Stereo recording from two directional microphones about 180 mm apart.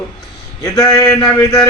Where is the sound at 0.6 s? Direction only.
20° left (ahead or behind).